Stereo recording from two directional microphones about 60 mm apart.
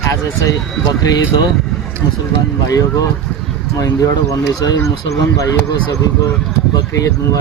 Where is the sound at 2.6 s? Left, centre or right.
Left.